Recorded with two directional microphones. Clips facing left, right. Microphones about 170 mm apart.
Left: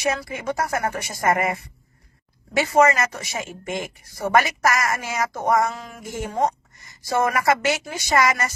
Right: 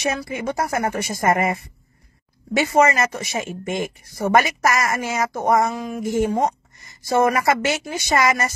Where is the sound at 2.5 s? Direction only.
20° right (ahead or behind).